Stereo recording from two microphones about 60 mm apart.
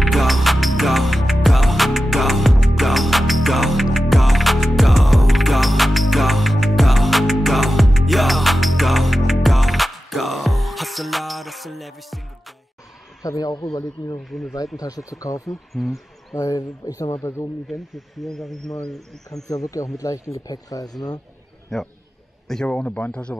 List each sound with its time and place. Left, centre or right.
0.0 s music: centre
13.2 s a man's voice: left
14.3 s speech: centre
15.0 s speech: left
15.8 s speech: centre
16.3 s speech: left
17.2 s a man's voice: left
17.6 s speech: centre
19.3 s speech: left
21.7 s speech: centre
22.7 s speech: left